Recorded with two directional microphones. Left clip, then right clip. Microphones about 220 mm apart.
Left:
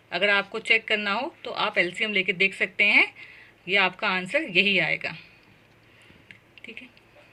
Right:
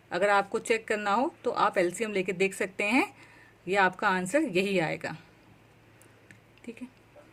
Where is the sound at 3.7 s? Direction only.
60° right (ahead or behind).